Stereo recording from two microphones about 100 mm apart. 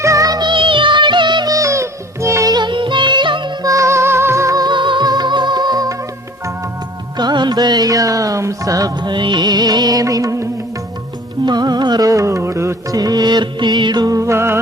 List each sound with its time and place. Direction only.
0.0 s music: 35° right (ahead or behind); by 1.5 s 50° right (ahead or behind)
1.5 s music: 30° right (ahead or behind)
2.5 s music: 50° right (ahead or behind)
3.6 s music: 35° right (ahead or behind)
7.2 s music: 45° right (ahead or behind)
9.0 s music: 50° right (ahead or behind); by 10.5 s 30° right (ahead or behind)
11.4 s music: 45° right (ahead or behind); by 14.6 s 25° right (ahead or behind)